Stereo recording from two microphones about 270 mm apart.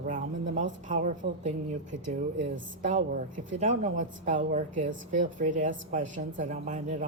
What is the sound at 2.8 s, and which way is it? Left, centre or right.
A woman's voice, right.